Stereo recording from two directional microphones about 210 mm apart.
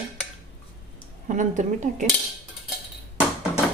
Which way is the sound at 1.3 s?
35° right (ahead or behind).